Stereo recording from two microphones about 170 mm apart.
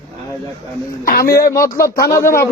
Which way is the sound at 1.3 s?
20° left (ahead or behind).